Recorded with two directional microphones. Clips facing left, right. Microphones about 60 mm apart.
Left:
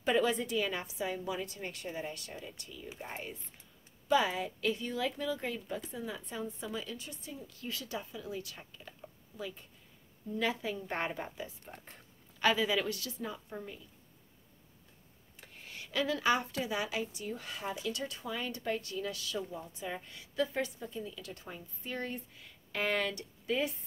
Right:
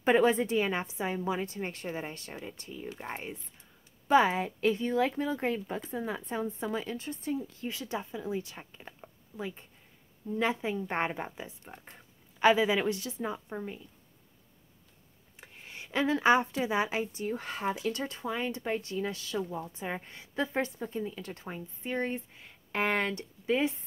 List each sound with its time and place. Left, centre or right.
0.0 s speech: right
7.6 s speech: right
10.4 s speech: right
15.4 s speech: right